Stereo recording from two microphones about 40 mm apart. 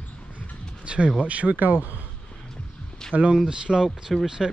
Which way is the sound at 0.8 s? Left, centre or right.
Right.